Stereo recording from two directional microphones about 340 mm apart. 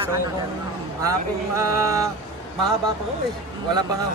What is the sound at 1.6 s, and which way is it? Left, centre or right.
Speech, centre.